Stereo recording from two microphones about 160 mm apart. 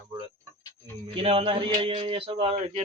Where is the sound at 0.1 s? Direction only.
30° right (ahead or behind).